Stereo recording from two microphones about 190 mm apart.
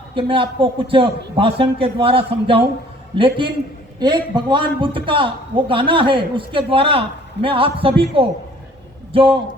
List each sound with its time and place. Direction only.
0.1 s a man's voice: 25° right (ahead or behind)